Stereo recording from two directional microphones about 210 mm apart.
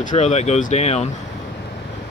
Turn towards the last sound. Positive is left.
turn(degrees=30)  # may be behind; listen again after turning